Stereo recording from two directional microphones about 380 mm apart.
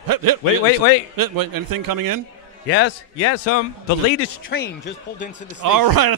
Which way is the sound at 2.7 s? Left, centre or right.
Left.